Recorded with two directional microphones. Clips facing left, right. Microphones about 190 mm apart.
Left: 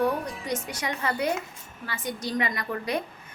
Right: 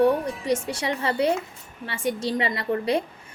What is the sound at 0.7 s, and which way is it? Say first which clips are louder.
A woman's voice: right 4 dB; 30° right (ahead or behind).